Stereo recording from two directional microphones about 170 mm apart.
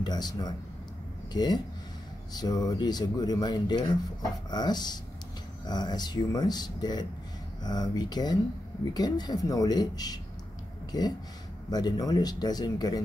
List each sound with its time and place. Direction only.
0.0 s speech: 25° left (ahead or behind)